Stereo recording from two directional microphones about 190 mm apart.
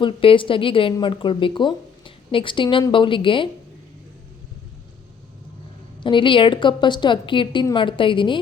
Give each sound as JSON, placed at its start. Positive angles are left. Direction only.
{"t": 0.0, "sound": "speech", "side_deg": 25}
{"t": 6.0, "sound": "speech", "side_deg": 25}